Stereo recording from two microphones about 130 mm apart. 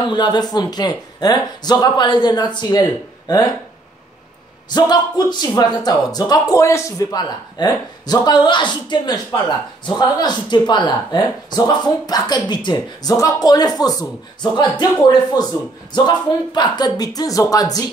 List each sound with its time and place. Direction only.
0.1 s speech: 35° left (ahead or behind)
4.6 s speech: 30° left (ahead or behind)